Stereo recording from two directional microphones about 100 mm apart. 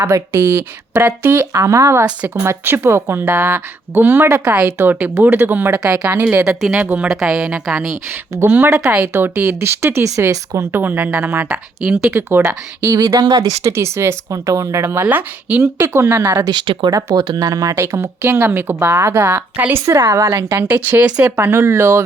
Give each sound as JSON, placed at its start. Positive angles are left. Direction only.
{"t": 0.0, "sound": "a woman's voice", "side_deg": -25}
{"t": 8.1, "sound": "speech", "side_deg": -25}
{"t": 12.1, "sound": "speech", "side_deg": -25}
{"t": 15.0, "sound": "speech", "side_deg": -15}
{"t": 16.5, "sound": "speech", "side_deg": -50}
{"t": 21.3, "sound": "speech", "side_deg": -25}